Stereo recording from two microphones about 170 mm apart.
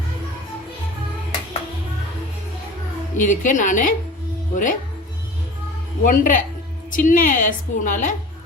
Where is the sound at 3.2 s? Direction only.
50° left (ahead or behind).